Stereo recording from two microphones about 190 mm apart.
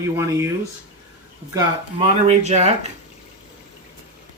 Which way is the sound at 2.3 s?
35° right (ahead or behind).